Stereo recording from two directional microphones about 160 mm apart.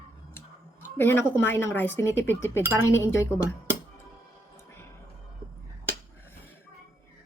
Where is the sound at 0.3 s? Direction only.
15° left (ahead or behind).